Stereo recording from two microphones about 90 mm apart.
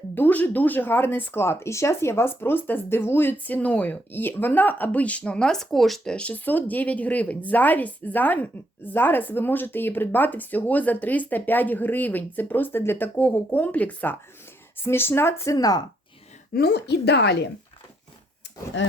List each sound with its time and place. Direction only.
0.1 s speech: 20° left (ahead or behind); by 6.1 s centre (ahead or behind)
6.1 s speech: 15° left (ahead or behind)
15.5 s speech: 45° left (ahead or behind)